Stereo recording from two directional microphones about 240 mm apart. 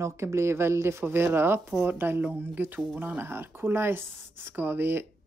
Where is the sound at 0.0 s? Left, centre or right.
Centre.